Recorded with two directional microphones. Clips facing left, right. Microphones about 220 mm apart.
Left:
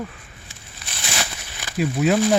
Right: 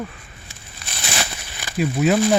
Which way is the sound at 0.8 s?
45° right (ahead or behind).